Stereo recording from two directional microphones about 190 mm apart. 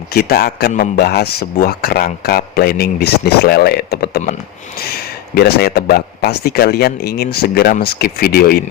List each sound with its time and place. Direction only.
0.1 s speech: 55° left (ahead or behind)